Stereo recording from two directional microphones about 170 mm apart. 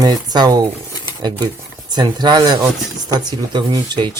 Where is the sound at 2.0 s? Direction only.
25° right (ahead or behind).